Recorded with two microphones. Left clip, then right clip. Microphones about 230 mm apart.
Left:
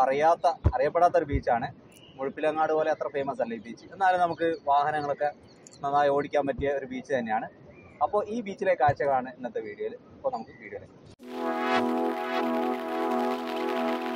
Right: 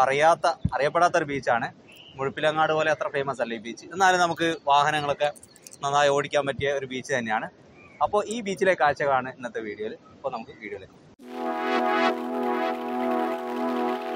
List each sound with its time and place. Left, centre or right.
0.0 s speech: right
11.2 s music: centre